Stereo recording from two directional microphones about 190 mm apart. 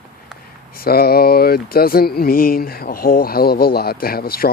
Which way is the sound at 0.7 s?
55° left (ahead or behind).